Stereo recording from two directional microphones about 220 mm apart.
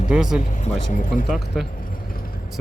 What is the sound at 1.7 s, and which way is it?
Keys jangling, 40° left (ahead or behind).